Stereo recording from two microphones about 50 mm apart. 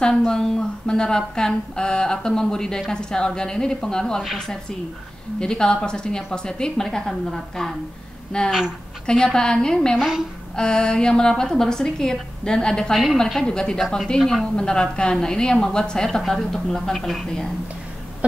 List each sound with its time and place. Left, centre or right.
0.3 s a woman's voice: centre
5.4 s a woman's voice: centre
8.5 s a woman's voice: centre
9.0 s a woman's voice: centre
9.9 s a woman's voice: centre
10.5 s a woman's voice: centre